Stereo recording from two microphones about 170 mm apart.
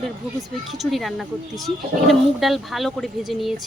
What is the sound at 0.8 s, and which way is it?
Speech, centre (ahead or behind).